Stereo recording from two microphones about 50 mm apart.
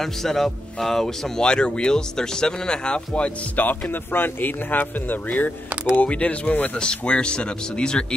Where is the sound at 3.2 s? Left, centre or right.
Left.